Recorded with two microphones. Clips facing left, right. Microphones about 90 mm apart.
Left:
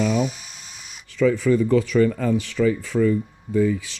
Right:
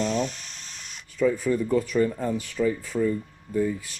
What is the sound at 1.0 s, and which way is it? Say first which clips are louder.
Speech: left 4 dB; 85° left.